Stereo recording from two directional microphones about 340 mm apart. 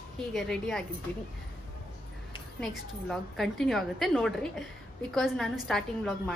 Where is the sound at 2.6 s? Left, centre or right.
Centre.